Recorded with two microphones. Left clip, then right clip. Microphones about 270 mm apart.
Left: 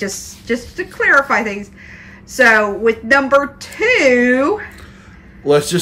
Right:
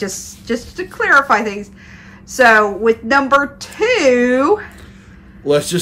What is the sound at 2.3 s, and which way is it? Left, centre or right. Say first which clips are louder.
Speech: right 1 dB; centre.